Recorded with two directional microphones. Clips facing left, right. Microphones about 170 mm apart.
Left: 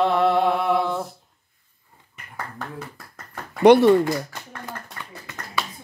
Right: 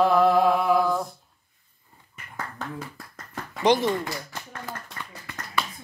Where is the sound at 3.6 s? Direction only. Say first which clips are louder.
Left 9 dB; 65° left (ahead or behind).